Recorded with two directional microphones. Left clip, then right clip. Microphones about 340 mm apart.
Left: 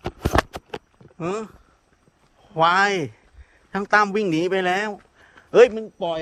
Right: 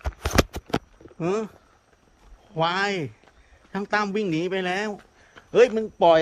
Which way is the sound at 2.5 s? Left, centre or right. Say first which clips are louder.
Left 6 dB; centre.